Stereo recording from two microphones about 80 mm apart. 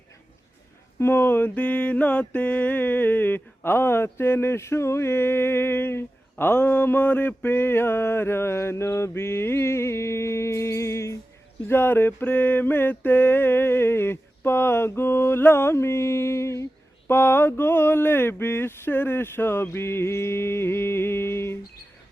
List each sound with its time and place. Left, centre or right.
0.9 s mantra: left